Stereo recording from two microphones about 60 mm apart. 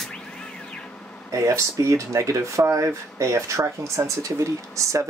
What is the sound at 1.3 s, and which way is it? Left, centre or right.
Speech, right.